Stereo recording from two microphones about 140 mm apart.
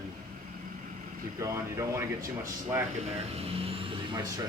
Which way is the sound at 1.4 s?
20° right (ahead or behind).